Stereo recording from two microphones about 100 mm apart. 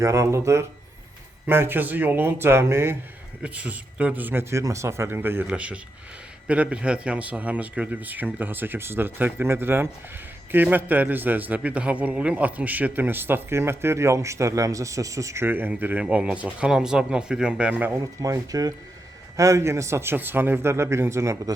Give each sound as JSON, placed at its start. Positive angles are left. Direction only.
{"t": 0.0, "sound": "a man's voice", "side_deg": -30}
{"t": 3.4, "sound": "a man's voice", "side_deg": -10}
{"t": 15.4, "sound": "speech", "side_deg": -20}
{"t": 18.0, "sound": "a man's voice", "side_deg": -35}